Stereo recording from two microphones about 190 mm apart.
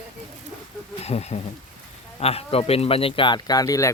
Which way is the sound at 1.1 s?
35° left (ahead or behind).